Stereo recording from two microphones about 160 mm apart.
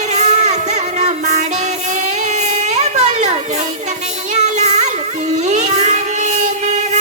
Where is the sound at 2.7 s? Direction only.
45° right (ahead or behind).